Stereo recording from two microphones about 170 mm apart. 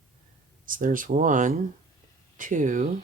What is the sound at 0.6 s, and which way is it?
Speech, 55° right (ahead or behind).